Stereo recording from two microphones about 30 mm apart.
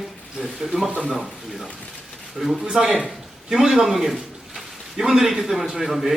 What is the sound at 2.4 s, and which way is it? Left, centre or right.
Speech, centre.